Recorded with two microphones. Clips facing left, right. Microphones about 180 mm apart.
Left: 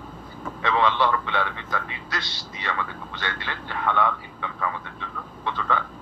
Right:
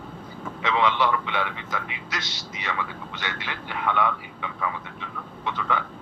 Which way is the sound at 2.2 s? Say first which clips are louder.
Right 1 dB; 90° right.